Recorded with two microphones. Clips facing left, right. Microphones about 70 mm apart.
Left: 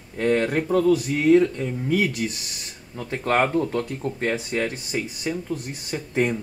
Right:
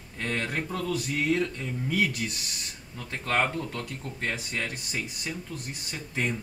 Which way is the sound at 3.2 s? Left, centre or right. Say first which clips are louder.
Left 7 dB; left.